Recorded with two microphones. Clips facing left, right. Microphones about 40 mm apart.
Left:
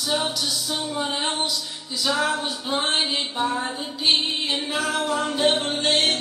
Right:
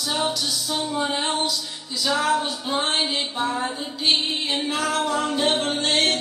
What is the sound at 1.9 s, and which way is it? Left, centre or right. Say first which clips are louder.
Music: right 2 dB; centre.